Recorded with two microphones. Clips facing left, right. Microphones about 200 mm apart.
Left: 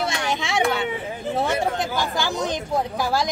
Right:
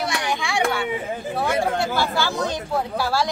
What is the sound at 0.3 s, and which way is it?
Children playing, 20° left (ahead or behind).